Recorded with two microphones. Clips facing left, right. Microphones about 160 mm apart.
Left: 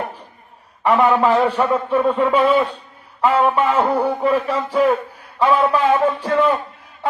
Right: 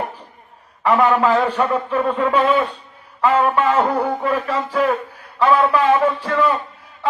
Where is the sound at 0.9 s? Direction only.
15° left (ahead or behind).